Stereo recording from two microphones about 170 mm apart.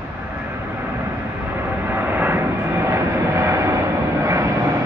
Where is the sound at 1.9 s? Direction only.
10° right (ahead or behind).